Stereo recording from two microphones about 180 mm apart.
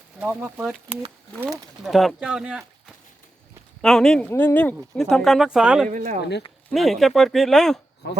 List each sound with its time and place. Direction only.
0.2 s speech: 10° right (ahead or behind)
3.8 s speech: 5° left (ahead or behind)
5.9 s speech: 45° right (ahead or behind)
6.7 s speech: centre (ahead or behind)
8.0 s speech: 65° left (ahead or behind)